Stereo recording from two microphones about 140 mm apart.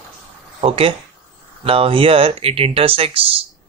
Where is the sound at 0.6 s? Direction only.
40° right (ahead or behind).